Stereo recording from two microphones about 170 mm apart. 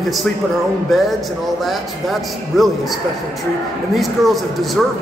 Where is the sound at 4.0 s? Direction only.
Centre (ahead or behind).